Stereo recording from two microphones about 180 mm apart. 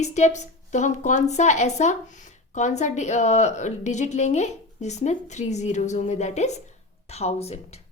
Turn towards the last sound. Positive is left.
turn(degrees=35)  # may be behind; listen again after turning